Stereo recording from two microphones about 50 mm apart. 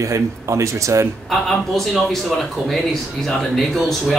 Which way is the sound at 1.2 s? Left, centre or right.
Centre.